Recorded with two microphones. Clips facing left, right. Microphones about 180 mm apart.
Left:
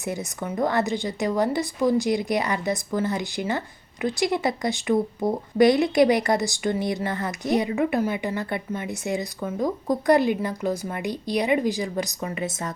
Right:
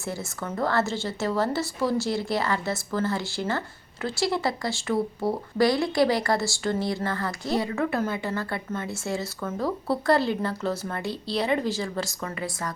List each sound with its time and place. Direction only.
0.0 s speech: 20° left (ahead or behind)